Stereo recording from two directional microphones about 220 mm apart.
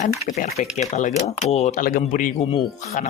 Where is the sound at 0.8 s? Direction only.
35° left (ahead or behind).